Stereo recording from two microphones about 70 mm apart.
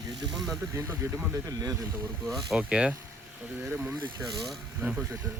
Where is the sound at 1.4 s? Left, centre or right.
Right.